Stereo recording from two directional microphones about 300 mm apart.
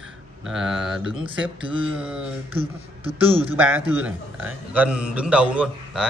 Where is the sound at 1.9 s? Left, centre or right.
Centre.